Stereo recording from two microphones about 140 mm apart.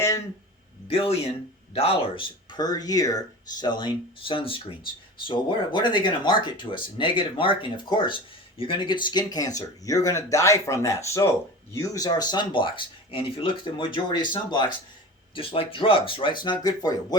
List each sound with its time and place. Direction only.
0.9 s speech: 45° left (ahead or behind)